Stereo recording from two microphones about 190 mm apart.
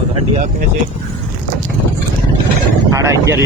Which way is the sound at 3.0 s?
15° right (ahead or behind).